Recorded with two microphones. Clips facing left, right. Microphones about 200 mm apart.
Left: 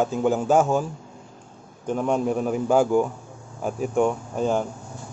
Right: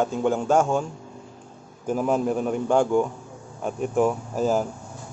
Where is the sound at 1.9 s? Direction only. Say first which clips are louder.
Even; 5° right (ahead or behind).